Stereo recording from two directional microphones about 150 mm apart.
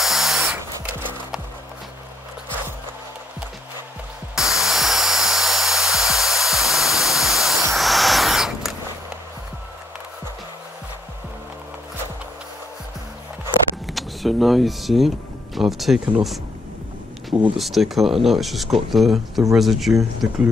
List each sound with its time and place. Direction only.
0.0 s tools: centre (ahead or behind)
4.4 s a sound: 5° right (ahead or behind)
13.8 s speech: centre (ahead or behind)
17.6 s speech: centre (ahead or behind)